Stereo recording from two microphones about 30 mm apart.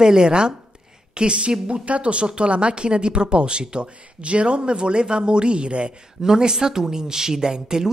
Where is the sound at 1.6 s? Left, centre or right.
Right.